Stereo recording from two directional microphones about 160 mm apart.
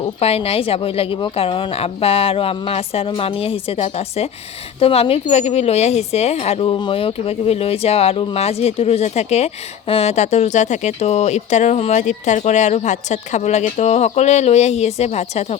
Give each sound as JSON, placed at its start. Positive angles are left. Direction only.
{"t": 0.2, "sound": "a woman's voice", "side_deg": 40}